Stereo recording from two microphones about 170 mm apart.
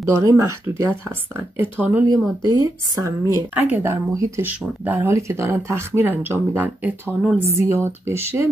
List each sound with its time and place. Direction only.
0.0 s speech: 20° right (ahead or behind)
2.4 s speech: 20° right (ahead or behind)